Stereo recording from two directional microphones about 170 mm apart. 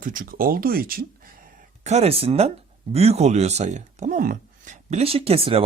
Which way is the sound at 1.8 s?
40° right (ahead or behind).